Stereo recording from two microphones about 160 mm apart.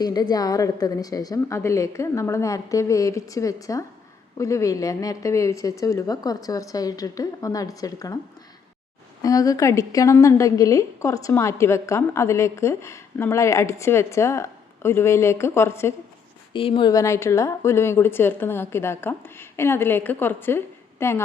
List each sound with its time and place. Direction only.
0.0 s speech: 25° left (ahead or behind)
9.2 s a woman's voice: 20° left (ahead or behind)
16.5 s speech: 35° left (ahead or behind)
16.9 s a woman's voice: 20° left (ahead or behind)